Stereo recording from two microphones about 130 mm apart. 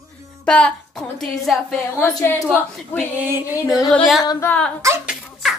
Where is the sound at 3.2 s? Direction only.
15° right (ahead or behind).